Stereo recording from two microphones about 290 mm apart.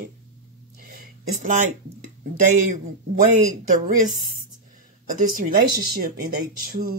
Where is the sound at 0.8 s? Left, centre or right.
Right.